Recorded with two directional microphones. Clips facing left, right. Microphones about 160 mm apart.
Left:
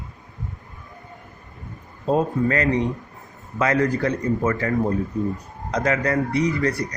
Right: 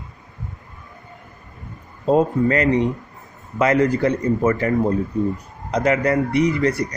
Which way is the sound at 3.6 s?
20° right (ahead or behind).